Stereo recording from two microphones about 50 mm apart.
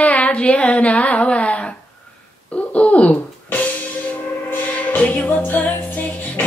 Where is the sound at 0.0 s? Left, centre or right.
Left.